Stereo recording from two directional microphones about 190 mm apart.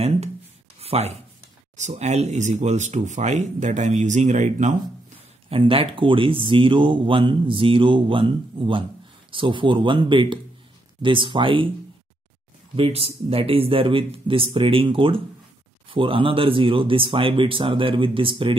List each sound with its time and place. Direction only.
0.7 s a sound: 35° right (ahead or behind)
1.8 s speech: 35° right (ahead or behind)
12.7 s speech: 30° right (ahead or behind)